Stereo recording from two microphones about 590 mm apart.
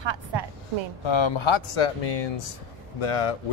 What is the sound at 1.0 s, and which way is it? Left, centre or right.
Speech, left.